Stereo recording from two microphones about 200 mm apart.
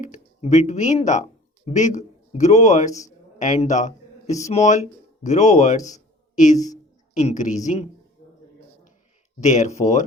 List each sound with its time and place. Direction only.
0.0 s a woman's voice: 35° left (ahead or behind)
9.4 s speech: 35° left (ahead or behind)